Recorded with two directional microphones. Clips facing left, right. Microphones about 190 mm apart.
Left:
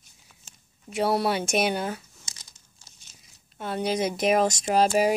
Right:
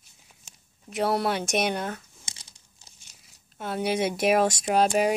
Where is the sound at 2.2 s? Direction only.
25° right (ahead or behind).